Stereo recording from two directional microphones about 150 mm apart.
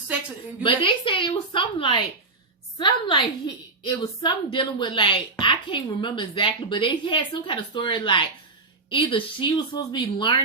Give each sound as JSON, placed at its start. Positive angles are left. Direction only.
{"t": 0.6, "sound": "a woman's voice", "side_deg": 35}